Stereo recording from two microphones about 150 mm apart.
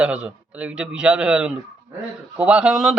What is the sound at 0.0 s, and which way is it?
A man's voice, 10° right (ahead or behind).